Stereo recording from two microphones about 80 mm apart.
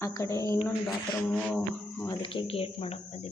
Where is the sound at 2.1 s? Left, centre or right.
Left.